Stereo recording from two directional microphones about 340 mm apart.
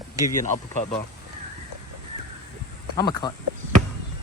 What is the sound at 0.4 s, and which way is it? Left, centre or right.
Speech, left.